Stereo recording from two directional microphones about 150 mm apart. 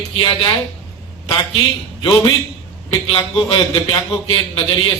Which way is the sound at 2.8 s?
35° left (ahead or behind).